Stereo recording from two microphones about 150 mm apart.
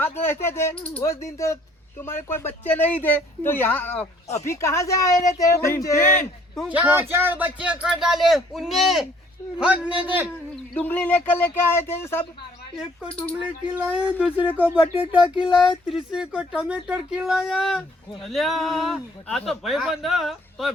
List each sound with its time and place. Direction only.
0.0 s speech: 15° left (ahead or behind)
1.0 s speech: 20° left (ahead or behind)
6.6 s speech: 10° right (ahead or behind)
10.5 s speech: 10° left (ahead or behind)
13.9 s speech: 10° right (ahead or behind)